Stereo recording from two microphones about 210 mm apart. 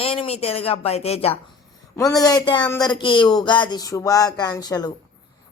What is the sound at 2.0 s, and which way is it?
Speech, 15° left (ahead or behind).